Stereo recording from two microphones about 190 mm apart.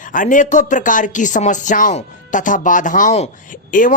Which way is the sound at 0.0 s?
45° left (ahead or behind).